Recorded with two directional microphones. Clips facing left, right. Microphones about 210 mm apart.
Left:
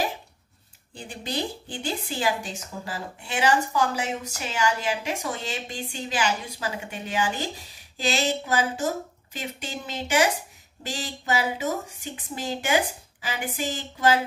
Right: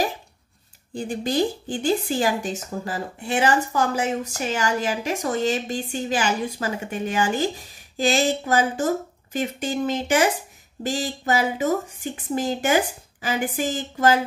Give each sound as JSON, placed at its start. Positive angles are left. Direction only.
{"t": 0.9, "sound": "speech", "side_deg": -45}